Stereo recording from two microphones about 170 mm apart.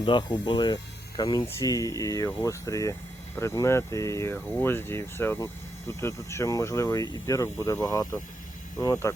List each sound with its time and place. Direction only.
0.0 s speech: 25° left (ahead or behind)